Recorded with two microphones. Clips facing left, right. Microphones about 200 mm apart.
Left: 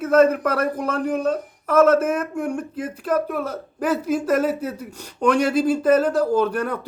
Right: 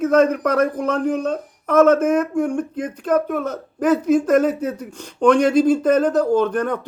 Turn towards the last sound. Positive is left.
turn(degrees=5)  # may be behind; listen again after turning